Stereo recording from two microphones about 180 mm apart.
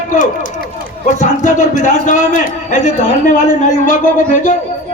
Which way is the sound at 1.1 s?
45° left (ahead or behind).